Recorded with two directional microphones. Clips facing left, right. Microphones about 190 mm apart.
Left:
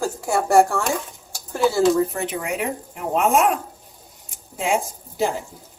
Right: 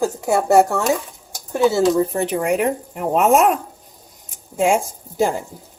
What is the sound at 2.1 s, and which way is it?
Speech, 35° right (ahead or behind).